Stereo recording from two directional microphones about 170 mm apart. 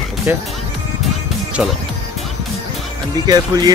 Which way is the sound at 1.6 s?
5° right (ahead or behind).